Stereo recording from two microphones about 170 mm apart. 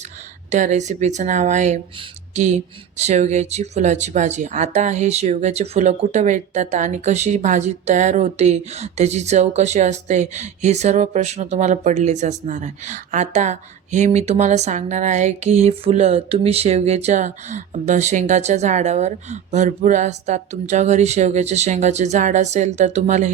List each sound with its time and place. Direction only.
0.5 s speech: 45° right (ahead or behind)